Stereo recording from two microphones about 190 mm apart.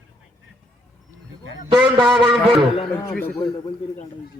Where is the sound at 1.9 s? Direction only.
25° right (ahead or behind).